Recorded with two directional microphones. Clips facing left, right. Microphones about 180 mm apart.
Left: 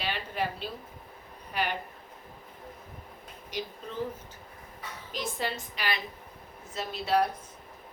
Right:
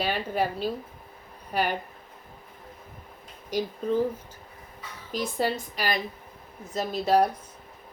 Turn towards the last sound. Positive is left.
turn(degrees=-40)  # may be behind; listen again after turning